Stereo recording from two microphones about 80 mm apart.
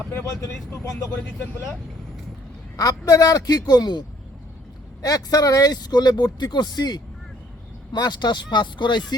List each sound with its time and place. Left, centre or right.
0.1 s speech: left
1.1 s speech: left
2.7 s a man's voice: left
5.0 s speech: left